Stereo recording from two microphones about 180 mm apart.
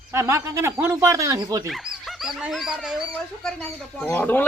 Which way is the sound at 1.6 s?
Centre (ahead or behind).